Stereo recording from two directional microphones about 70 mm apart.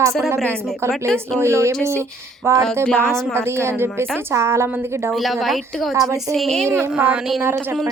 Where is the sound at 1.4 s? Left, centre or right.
Right.